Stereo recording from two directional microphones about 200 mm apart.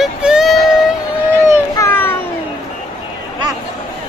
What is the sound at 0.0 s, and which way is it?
Music, 5° right (ahead or behind).